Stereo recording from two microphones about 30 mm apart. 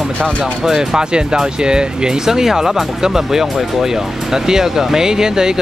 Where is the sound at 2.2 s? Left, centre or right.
Centre.